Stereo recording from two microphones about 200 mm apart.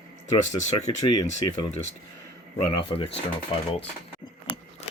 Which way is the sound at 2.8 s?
25° left (ahead or behind).